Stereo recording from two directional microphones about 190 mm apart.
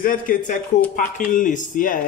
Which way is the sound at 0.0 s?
45° left (ahead or behind).